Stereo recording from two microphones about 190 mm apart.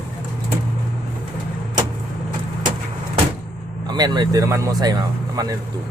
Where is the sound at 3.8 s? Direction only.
20° right (ahead or behind).